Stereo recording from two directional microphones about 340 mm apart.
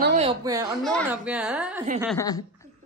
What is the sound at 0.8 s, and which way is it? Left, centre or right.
A man's voice, centre.